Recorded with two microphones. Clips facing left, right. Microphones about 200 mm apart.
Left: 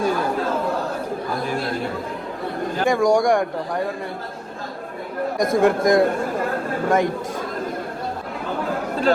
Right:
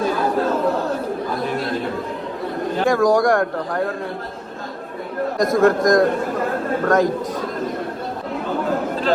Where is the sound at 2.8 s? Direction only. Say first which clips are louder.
Right 1 dB; centre (ahead or behind).